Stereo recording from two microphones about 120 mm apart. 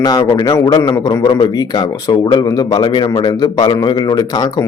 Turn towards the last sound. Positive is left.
turn(degrees=35)  # may be behind; listen again after turning